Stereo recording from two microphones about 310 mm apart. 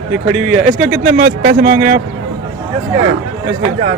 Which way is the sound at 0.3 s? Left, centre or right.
Right.